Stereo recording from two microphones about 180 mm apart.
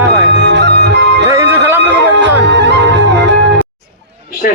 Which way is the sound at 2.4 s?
75° right (ahead or behind).